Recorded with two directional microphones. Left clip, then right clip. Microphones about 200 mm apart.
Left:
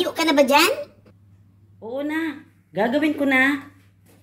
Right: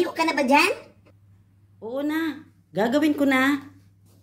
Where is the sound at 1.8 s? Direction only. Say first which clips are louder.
Left 1 dB; 15° right (ahead or behind).